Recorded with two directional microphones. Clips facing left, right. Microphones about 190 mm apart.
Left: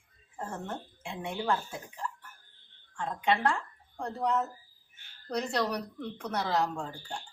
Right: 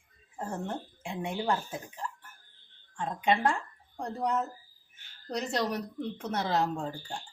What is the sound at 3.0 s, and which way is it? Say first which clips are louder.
A woman's voice: right 1 dB; 20° right (ahead or behind).